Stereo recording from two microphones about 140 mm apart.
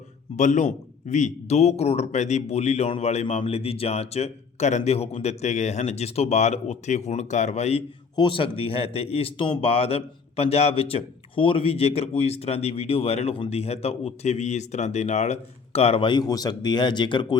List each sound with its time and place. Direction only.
0.3 s a man's voice: 60° left (ahead or behind)
8.1 s a man's voice: 35° left (ahead or behind)